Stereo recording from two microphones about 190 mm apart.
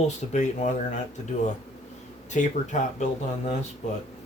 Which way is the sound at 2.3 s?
40° left (ahead or behind).